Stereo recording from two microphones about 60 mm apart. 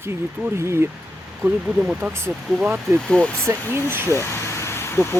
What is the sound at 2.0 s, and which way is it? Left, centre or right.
Speech, right.